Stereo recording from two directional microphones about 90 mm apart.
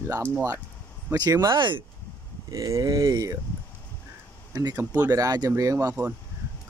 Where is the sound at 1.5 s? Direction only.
65° right (ahead or behind).